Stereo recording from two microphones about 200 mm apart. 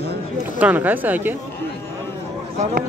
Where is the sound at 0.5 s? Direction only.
10° right (ahead or behind).